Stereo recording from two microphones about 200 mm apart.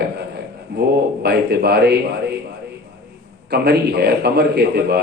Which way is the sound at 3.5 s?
50° right (ahead or behind).